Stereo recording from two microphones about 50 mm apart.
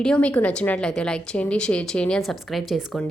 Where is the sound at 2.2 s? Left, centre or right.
Centre.